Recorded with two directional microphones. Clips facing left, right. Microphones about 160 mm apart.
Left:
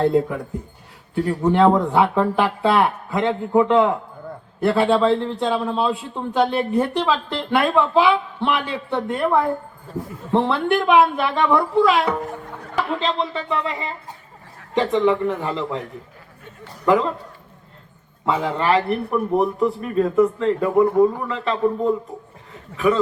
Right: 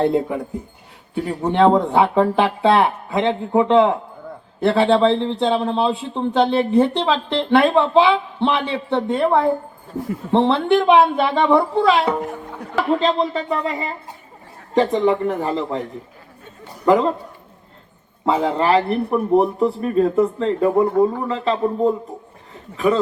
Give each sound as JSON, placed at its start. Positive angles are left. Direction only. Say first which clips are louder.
{"t": 0.0, "sound": "a man's voice", "louder": "even", "side_deg": -25}
{"t": 16.8, "sound": "a man's voice", "louder": "right 3 dB", "side_deg": -30}
{"t": 18.3, "sound": "a man's voice", "louder": "right 3 dB", "side_deg": -30}